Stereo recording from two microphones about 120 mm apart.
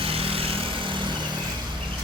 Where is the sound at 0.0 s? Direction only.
50° right (ahead or behind).